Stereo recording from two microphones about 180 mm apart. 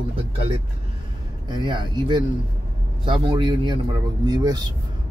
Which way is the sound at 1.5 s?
25° right (ahead or behind).